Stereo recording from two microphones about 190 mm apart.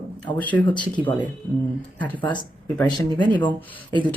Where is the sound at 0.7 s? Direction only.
25° left (ahead or behind).